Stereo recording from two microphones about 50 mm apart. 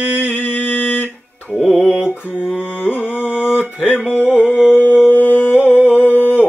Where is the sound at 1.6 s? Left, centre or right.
Right.